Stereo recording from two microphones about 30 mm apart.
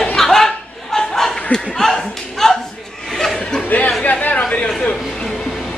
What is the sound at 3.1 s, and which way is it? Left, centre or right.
Chuckle, centre.